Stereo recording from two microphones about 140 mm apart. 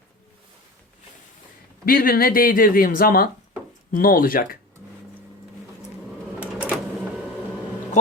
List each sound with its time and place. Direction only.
1.8 s speech: 90° left
6.4 s printer: 10° right (ahead or behind)